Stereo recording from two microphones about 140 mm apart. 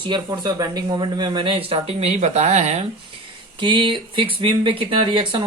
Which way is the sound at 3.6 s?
35° right (ahead or behind).